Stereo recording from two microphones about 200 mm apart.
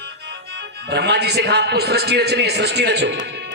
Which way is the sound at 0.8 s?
55° right (ahead or behind).